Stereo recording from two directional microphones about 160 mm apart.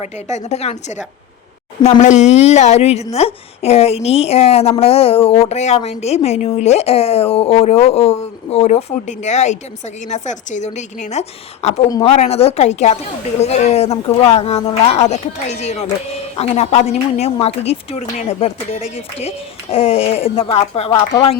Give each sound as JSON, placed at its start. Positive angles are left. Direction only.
{"t": 0.0, "sound": "a woman's voice", "side_deg": 45}